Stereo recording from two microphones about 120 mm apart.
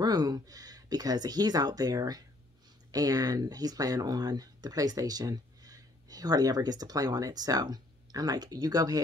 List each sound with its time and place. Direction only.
0.0 s speech: 35° right (ahead or behind)